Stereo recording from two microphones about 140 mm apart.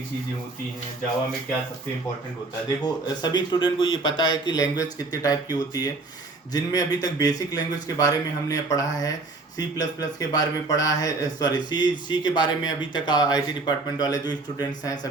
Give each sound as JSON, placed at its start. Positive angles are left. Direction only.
{"t": 2.8, "sound": "speech", "side_deg": 30}